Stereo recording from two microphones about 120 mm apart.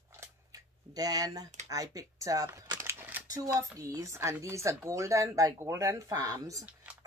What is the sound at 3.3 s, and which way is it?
Speech, 30° right (ahead or behind).